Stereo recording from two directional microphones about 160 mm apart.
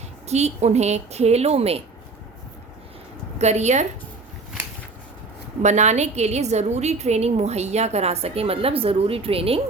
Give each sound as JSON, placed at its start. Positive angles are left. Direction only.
{"t": 0.3, "sound": "a woman's voice", "side_deg": -45}
{"t": 3.3, "sound": "a woman's voice", "side_deg": -45}
{"t": 5.6, "sound": "a woman's voice", "side_deg": -45}